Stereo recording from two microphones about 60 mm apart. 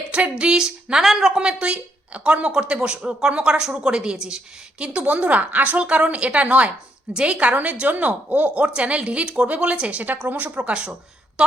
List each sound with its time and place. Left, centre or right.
0.1 s speech: centre
1.4 s speech: centre
4.8 s a woman's voice: right
10.0 s a woman's voice: right; by 11.5 s centre